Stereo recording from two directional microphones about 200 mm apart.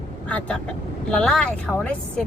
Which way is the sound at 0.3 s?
5° left (ahead or behind).